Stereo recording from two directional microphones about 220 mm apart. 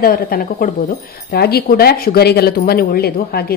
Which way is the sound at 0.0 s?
40° left (ahead or behind).